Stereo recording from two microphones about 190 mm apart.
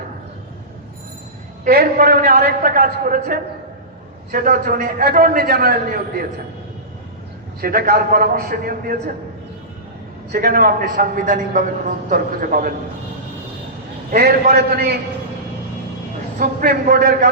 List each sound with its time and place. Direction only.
1.6 s a man's voice: 50° right (ahead or behind)
7.6 s a man's voice: 55° right (ahead or behind)
10.3 s a man's voice: 50° right (ahead or behind)
14.1 s a man's voice: 55° right (ahead or behind)
16.4 s a man's voice: 50° right (ahead or behind)